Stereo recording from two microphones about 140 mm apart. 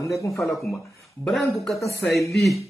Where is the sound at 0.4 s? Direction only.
Centre (ahead or behind).